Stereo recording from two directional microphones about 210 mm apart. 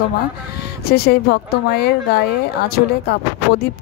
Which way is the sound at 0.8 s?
50° left (ahead or behind).